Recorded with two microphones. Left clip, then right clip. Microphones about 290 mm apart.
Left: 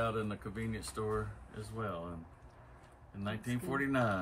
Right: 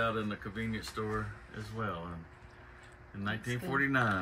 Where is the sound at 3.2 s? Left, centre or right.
Left.